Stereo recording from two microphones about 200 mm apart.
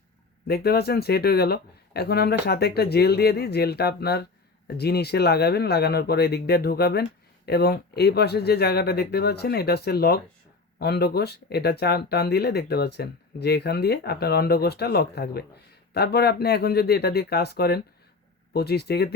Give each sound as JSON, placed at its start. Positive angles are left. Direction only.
{"t": 0.4, "sound": "speech", "side_deg": 50}